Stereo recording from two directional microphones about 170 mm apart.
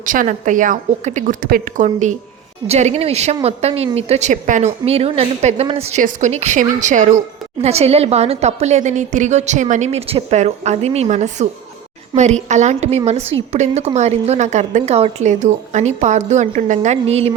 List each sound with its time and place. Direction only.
0.0 s a woman's voice: 50° right (ahead or behind)
6.0 s a woman's voice: 50° right (ahead or behind)